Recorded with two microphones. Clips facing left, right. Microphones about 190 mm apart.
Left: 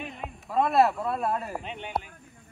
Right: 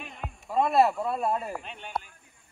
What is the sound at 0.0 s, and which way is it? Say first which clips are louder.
Speech: left 3 dB; centre (ahead or behind).